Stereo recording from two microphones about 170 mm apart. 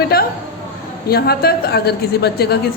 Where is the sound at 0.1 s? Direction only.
60° left (ahead or behind).